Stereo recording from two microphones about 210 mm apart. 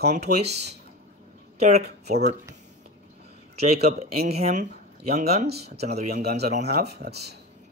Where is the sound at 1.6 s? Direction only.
30° right (ahead or behind).